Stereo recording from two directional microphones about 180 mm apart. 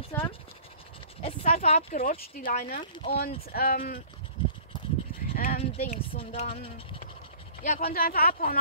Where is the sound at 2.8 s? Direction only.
25° left (ahead or behind).